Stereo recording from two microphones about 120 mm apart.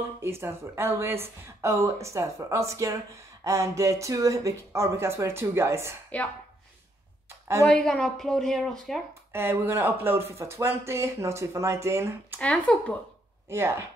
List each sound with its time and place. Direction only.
0.2 s speech: 20° right (ahead or behind)
7.2 s a sound: 20° right (ahead or behind)
7.6 s a woman's voice: 5° left (ahead or behind)
9.3 s speech: 20° right (ahead or behind)
12.4 s speech: 10° left (ahead or behind)
13.5 s speech: 20° right (ahead or behind)